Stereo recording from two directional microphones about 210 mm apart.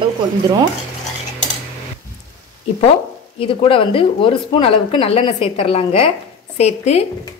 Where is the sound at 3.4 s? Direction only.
25° left (ahead or behind).